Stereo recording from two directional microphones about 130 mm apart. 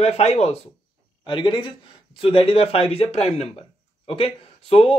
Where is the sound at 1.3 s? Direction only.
40° left (ahead or behind).